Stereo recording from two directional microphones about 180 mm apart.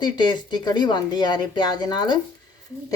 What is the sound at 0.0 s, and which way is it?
Speech, 25° left (ahead or behind).